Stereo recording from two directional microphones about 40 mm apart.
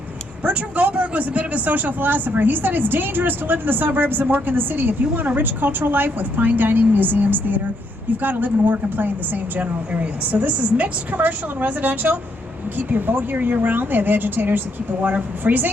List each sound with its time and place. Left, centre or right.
0.4 s a woman's voice: right
9.9 s a woman's voice: right
12.9 s a woman's voice: right